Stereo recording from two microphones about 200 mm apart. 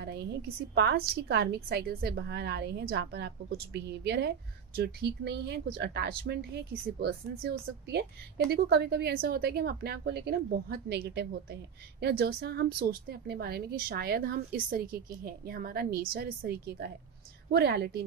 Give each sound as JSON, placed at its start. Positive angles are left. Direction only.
{"t": 0.0, "sound": "a woman's voice", "side_deg": -55}